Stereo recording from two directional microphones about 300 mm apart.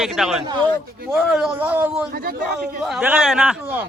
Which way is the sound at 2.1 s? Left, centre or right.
Right.